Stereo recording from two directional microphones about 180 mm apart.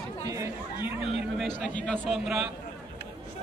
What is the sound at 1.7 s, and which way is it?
Speech, 5° left (ahead or behind).